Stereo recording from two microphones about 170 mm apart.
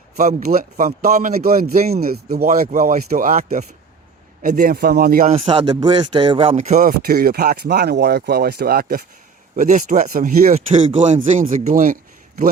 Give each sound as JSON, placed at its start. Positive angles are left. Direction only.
{"t": 0.2, "sound": "speech", "side_deg": -45}
{"t": 0.4, "sound": "speech", "side_deg": -60}
{"t": 1.0, "sound": "speech", "side_deg": -45}
{"t": 1.5, "sound": "speech", "side_deg": -60}
{"t": 5.5, "sound": "speech", "side_deg": -25}
{"t": 6.6, "sound": "speech", "side_deg": -45}
{"t": 7.0, "sound": "speech", "side_deg": -60}
{"t": 9.6, "sound": "speech", "side_deg": -45}